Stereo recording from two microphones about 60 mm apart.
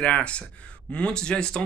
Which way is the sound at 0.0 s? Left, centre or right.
Centre.